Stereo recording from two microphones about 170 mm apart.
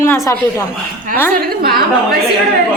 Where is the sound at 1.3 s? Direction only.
60° right (ahead or behind).